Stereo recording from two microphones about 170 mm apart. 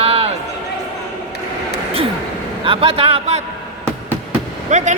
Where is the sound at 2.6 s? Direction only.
30° right (ahead or behind).